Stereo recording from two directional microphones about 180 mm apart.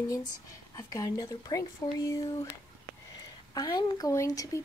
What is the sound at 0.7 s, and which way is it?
Speech, 20° left (ahead or behind).